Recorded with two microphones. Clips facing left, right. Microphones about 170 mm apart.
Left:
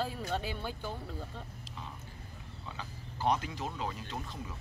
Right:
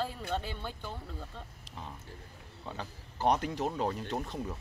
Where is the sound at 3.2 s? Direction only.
60° right (ahead or behind).